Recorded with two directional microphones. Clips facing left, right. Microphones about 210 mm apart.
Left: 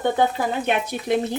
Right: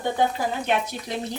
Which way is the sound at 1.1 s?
60° left (ahead or behind).